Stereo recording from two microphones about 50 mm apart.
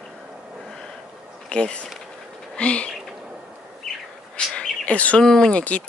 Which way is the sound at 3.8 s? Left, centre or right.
Centre.